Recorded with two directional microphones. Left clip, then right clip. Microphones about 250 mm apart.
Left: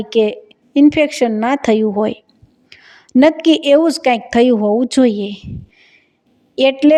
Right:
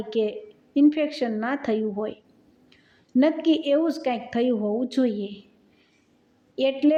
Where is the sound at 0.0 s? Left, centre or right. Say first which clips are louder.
Left 11 dB; left.